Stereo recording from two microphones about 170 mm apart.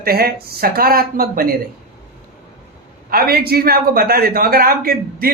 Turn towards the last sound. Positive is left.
turn(degrees=-60)  # may be behind; listen again after turning